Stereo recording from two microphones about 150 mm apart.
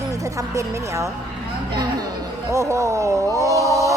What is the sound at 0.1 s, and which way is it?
Speech, 20° right (ahead or behind).